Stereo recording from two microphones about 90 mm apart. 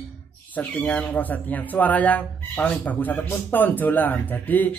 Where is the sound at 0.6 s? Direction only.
20° left (ahead or behind).